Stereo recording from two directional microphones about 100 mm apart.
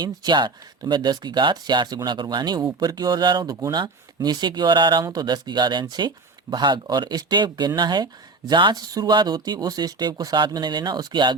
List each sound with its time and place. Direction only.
0.0 s speech: 50° right (ahead or behind)